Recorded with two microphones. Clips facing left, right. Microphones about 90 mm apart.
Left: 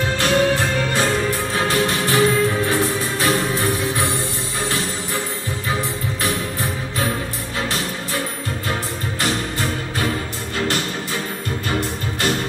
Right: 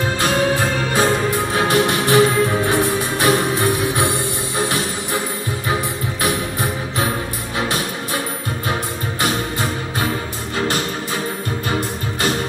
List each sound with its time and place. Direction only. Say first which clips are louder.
0.2 s music: left 1 dB; 5° right (ahead or behind)
1.5 s music: right 4 dB; 15° right (ahead or behind)
6.2 s music: right 3 dB; 15° right (ahead or behind)
9.2 s music: right 2 dB; 5° right (ahead or behind)